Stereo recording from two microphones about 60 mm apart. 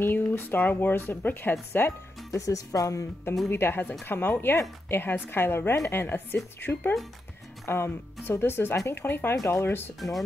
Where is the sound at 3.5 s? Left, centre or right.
Left.